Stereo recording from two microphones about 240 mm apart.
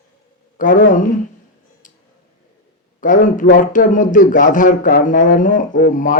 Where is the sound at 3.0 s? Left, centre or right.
Left.